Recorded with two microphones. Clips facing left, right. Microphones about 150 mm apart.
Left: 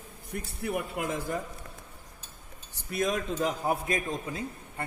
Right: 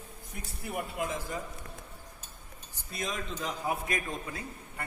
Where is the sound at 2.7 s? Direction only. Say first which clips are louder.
Left 8 dB; 60° left (ahead or behind).